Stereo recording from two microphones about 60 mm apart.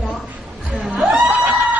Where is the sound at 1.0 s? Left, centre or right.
Centre.